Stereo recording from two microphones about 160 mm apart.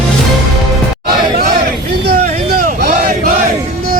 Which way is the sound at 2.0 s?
65° right (ahead or behind).